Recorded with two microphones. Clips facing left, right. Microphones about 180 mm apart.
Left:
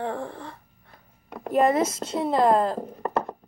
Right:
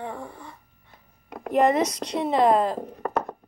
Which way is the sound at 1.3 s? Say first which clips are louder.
Even; centre (ahead or behind).